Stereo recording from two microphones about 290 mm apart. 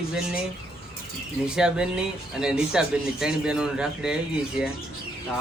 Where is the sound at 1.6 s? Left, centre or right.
Centre.